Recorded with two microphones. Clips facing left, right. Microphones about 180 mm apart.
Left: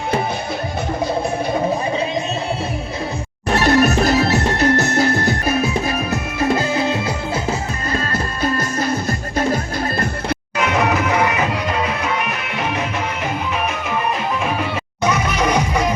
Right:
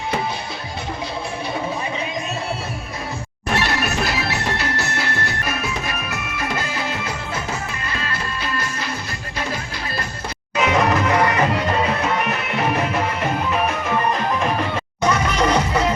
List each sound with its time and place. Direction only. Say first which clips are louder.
3.5 s music: left 8 dB; 45° left (ahead or behind)
7.9 s music: left 6 dB; 40° left (ahead or behind)
10.6 s music: right 1 dB; 5° left (ahead or behind)
15.0 s music: even; 10° left (ahead or behind)